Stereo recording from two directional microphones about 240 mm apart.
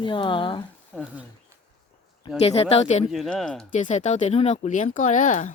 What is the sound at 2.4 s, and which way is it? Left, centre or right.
Speech, left.